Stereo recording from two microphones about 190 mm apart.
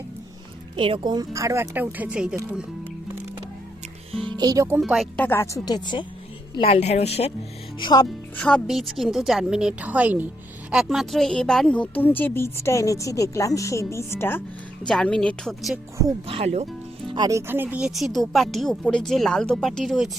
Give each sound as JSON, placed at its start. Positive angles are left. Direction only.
{"t": 0.8, "sound": "speech", "side_deg": -25}
{"t": 4.1, "sound": "music", "side_deg": -25}
{"t": 4.8, "sound": "a woman's voice", "side_deg": 0}
{"t": 6.5, "sound": "a woman's voice", "side_deg": 30}
{"t": 7.8, "sound": "speech", "side_deg": 25}
{"t": 8.4, "sound": "a woman's voice", "side_deg": 5}
{"t": 16.2, "sound": "speech", "side_deg": -30}
{"t": 17.1, "sound": "speech", "side_deg": -20}